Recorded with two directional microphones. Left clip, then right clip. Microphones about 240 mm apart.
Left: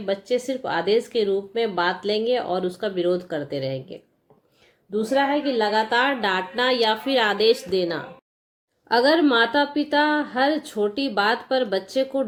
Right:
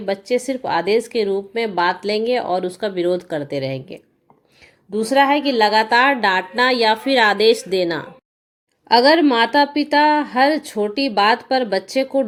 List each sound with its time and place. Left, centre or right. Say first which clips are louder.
0.0 s speech: right 4 dB; right
5.3 s speech: right 6 dB; right
9.2 s speech: right 4 dB; right